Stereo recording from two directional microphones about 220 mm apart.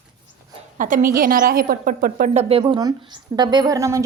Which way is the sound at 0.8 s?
35° right (ahead or behind).